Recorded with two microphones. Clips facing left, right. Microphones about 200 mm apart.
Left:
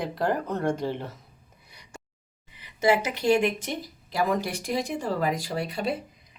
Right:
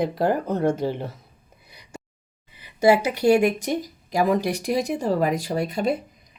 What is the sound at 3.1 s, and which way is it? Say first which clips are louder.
Speech: right 5 dB; 40° right (ahead or behind).